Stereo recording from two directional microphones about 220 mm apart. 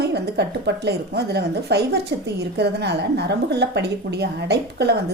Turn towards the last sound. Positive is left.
turn(degrees=-50)  # may be behind; listen again after turning